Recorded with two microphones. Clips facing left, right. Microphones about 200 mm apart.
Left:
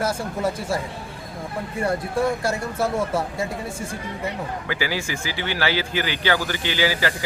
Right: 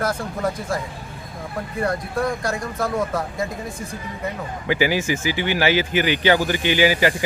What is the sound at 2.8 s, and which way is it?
Speech, 10° left (ahead or behind).